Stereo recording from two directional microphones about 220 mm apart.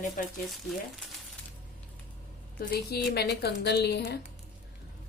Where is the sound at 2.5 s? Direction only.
45° left (ahead or behind).